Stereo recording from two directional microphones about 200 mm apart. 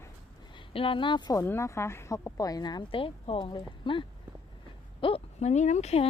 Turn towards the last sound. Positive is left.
turn(degrees=30)  # may be behind; listen again after turning